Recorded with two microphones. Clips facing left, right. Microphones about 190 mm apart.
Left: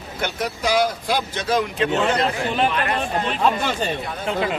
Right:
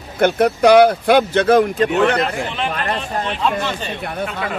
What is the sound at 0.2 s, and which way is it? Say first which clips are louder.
Speech: right 12 dB; 60° right (ahead or behind).